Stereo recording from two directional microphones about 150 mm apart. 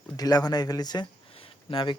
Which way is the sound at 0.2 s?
25° left (ahead or behind).